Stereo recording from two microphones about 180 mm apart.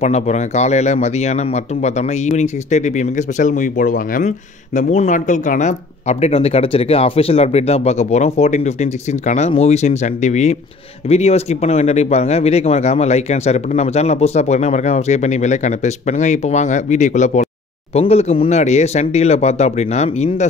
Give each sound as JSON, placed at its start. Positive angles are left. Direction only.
{"t": 0.0, "sound": "speech", "side_deg": 40}